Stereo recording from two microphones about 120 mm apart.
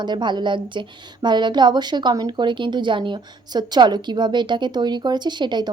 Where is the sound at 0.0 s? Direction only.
40° right (ahead or behind).